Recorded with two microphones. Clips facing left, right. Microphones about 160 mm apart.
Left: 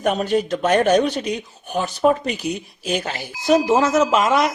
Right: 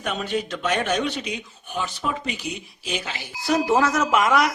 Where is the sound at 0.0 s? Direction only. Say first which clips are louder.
Left 7 dB; 45° left (ahead or behind).